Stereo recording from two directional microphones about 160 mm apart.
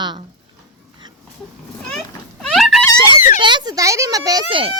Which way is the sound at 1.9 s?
5° left (ahead or behind).